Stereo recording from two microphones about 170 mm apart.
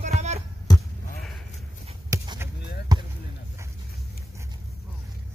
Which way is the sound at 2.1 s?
20° right (ahead or behind).